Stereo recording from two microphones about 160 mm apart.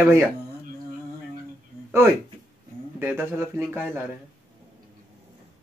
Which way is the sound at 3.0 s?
15° right (ahead or behind).